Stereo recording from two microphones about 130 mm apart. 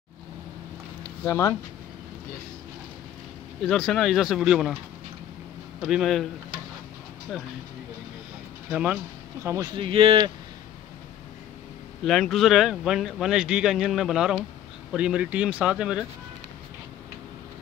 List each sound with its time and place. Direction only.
1.2 s speech: 20° left (ahead or behind)
3.6 s speech: centre (ahead or behind)
5.8 s speech: 5° right (ahead or behind)
8.6 s speech: 10° right (ahead or behind)
9.8 s speech: 45° right (ahead or behind)
12.0 s speech: centre (ahead or behind)